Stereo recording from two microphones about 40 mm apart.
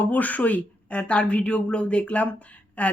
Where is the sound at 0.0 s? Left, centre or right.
Left.